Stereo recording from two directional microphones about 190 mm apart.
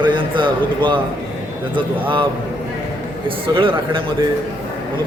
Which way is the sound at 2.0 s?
25° right (ahead or behind).